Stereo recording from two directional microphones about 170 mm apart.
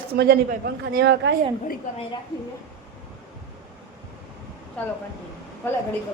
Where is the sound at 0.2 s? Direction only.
65° right (ahead or behind).